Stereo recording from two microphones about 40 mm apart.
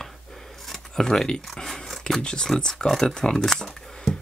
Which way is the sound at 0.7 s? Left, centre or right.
Centre.